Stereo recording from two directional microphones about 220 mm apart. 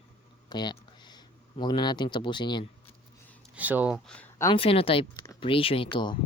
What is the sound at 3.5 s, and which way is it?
Speech, 5° right (ahead or behind).